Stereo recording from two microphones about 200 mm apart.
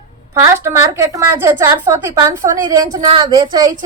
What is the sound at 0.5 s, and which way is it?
A woman's voice, 15° right (ahead or behind).